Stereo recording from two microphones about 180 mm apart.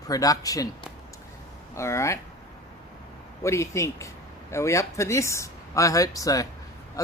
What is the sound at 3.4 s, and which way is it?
Speech, 15° left (ahead or behind).